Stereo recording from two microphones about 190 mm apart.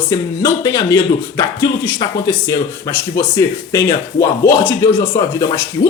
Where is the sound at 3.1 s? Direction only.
15° left (ahead or behind).